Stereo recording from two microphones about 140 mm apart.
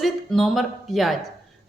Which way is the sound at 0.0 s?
Centre (ahead or behind).